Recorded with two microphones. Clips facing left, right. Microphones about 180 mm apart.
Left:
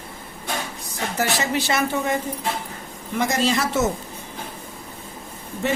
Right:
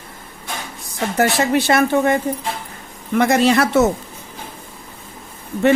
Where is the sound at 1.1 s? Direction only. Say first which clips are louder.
Right 7 dB; 55° right (ahead or behind).